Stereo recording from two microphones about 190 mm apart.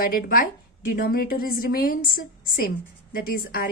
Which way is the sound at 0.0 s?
50° left (ahead or behind).